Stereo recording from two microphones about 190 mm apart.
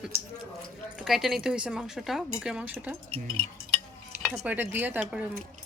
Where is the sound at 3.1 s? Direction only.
30° right (ahead or behind).